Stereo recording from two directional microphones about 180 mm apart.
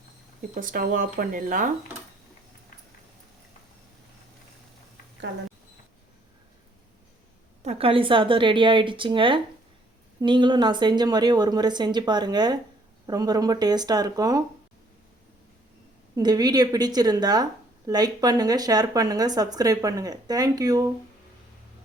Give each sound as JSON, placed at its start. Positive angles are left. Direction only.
{"t": 0.5, "sound": "speech", "side_deg": -50}
{"t": 7.6, "sound": "speech", "side_deg": -35}
{"t": 16.1, "sound": "speech", "side_deg": -20}